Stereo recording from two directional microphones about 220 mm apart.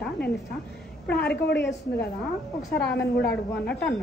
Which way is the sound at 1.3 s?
50° left (ahead or behind).